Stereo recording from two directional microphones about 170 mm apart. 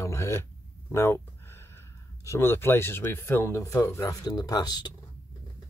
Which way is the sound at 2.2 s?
15° left (ahead or behind).